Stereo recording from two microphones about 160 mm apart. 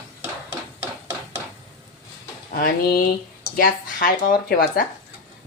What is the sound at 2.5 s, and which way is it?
Speech, 65° left (ahead or behind).